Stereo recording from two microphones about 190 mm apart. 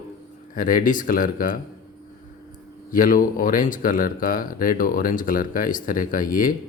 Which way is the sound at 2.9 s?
45° left (ahead or behind).